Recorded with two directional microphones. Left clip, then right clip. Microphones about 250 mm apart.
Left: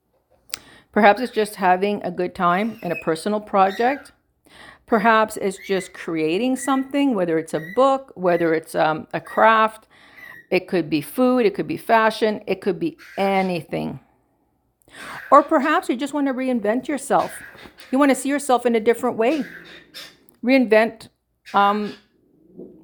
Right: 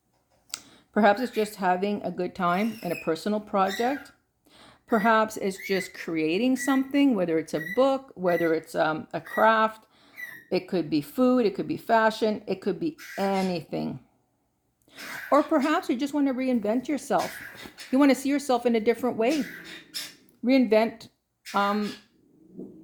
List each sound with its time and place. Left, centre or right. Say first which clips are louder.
0.5 s speech: left 6 dB; centre
20.4 s speech: left 6 dB; centre